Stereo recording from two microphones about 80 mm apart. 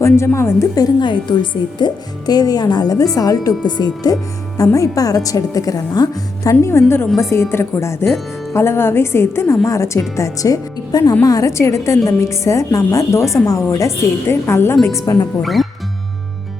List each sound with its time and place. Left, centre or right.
0.3 s a woman's voice: left
0.9 s a woman's voice: left
3.8 s speech: left
4.1 s a woman's voice: left
15.4 s speech: centre